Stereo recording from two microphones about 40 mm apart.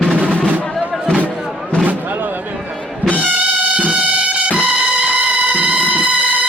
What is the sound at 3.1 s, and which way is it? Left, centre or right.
Music, left.